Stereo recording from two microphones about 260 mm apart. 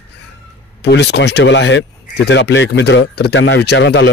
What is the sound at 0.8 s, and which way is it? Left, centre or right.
Speech, left.